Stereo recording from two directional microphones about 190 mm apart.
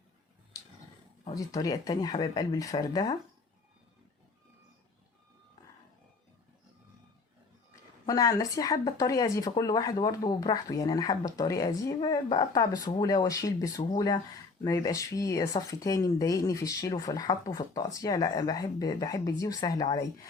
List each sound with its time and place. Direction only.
1.2 s speech: 20° left (ahead or behind)
8.0 s speech: 20° left (ahead or behind)